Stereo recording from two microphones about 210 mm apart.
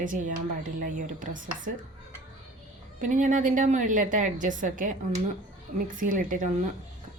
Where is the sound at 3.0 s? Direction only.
35° right (ahead or behind).